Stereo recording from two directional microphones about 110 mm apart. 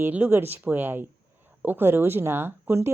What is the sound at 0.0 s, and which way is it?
Speech, 15° right (ahead or behind).